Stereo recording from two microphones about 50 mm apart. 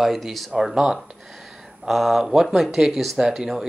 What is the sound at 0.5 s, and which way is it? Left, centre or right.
Speech, centre.